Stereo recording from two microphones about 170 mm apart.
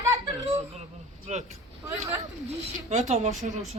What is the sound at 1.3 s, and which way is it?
Speech, 40° right (ahead or behind).